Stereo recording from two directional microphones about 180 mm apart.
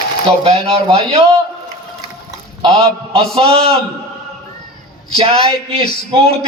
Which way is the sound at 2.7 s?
35° right (ahead or behind).